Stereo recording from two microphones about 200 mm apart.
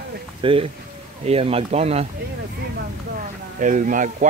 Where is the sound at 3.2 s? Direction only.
40° right (ahead or behind).